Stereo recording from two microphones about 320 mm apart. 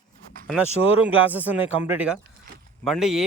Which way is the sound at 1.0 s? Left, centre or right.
Centre.